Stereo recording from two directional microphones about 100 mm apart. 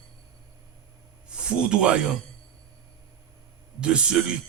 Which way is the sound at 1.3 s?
10° right (ahead or behind).